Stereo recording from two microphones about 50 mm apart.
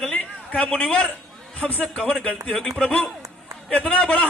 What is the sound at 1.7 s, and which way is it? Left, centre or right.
A man's voice, left.